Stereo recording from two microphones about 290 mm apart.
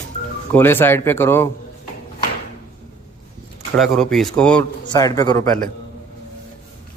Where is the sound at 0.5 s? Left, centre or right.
Centre.